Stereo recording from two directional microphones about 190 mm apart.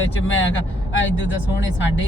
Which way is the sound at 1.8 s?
75° left (ahead or behind).